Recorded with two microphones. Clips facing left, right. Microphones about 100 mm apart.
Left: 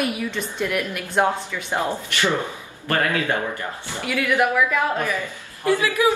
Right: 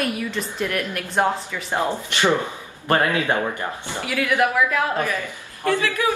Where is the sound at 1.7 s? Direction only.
20° right (ahead or behind).